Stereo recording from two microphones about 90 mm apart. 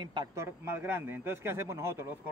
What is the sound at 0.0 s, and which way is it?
Speech, 55° right (ahead or behind).